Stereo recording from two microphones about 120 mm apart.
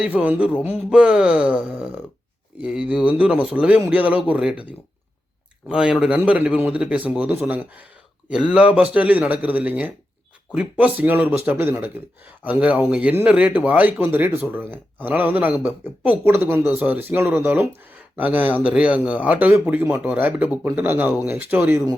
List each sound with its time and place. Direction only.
0.0 s speech: 10° right (ahead or behind)